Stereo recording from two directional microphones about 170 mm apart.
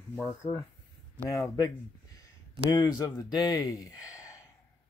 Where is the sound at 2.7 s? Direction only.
20° left (ahead or behind).